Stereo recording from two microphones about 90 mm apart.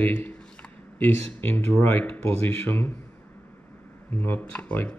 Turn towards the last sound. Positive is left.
turn(degrees=15)  # may be behind; listen again after turning